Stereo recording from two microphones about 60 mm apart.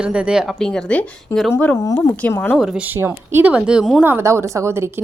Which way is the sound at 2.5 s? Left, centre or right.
Centre.